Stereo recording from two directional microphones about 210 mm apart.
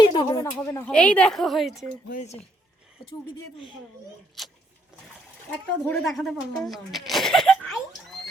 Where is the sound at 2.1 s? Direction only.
35° left (ahead or behind).